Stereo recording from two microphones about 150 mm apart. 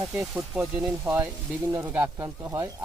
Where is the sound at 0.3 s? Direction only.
15° right (ahead or behind).